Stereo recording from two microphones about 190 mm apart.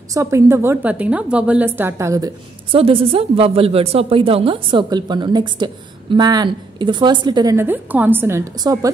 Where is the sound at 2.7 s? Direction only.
30° right (ahead or behind).